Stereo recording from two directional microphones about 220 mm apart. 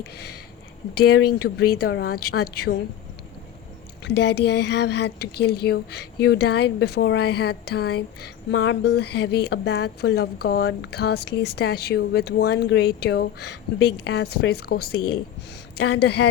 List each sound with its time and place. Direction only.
0.0 s a woman's voice: 45° left (ahead or behind)
4.0 s a woman's voice: 50° left (ahead or behind)